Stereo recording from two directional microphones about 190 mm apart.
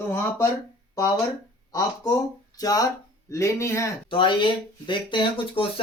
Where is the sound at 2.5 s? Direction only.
20° left (ahead or behind).